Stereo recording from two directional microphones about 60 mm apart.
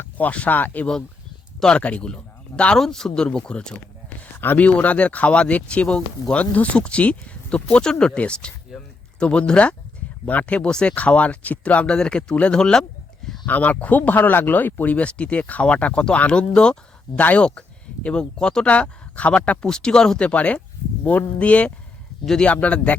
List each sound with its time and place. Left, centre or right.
0.0 s speech: left
2.7 s speech: centre
4.4 s speech: left; by 12.8 s centre
13.2 s a sound: centre
13.5 s speech: left
17.2 s speech: left
18.0 s speech: centre
19.6 s speech: centre